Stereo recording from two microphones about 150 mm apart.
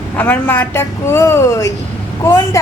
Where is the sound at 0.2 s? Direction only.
10° left (ahead or behind).